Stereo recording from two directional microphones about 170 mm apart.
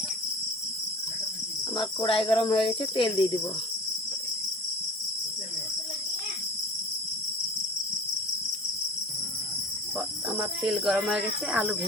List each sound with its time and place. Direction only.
1.7 s speech: 30° left (ahead or behind)
10.2 s speech: 5° right (ahead or behind)